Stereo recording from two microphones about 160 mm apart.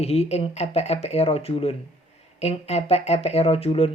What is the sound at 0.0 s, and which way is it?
Speech, 40° left (ahead or behind).